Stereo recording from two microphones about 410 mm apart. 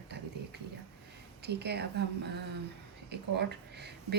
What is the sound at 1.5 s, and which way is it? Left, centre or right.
Speech, right.